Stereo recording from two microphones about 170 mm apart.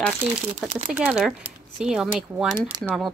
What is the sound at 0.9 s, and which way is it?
A woman's voice, 5° right (ahead or behind).